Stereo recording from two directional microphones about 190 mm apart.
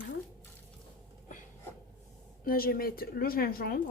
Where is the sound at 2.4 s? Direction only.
50° left (ahead or behind).